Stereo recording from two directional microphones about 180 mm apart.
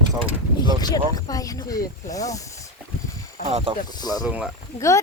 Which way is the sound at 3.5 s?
35° right (ahead or behind).